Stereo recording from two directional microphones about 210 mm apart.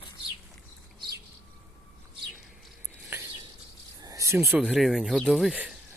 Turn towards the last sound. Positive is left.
turn(degrees=-5)  # may be behind; listen again after turning